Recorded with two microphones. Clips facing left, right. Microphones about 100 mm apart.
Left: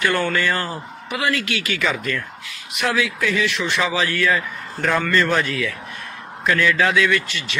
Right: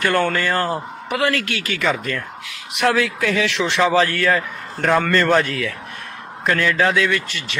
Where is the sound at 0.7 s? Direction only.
55° right (ahead or behind).